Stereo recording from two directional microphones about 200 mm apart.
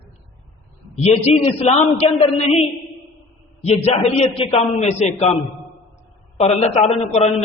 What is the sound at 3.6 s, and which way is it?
A man's voice, 30° left (ahead or behind).